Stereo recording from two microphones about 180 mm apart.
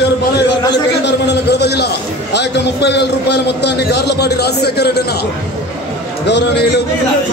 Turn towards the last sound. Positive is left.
turn(degrees=70)  # may be behind; listen again after turning